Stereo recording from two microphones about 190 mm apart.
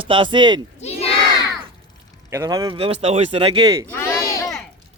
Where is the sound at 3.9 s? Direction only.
15° left (ahead or behind).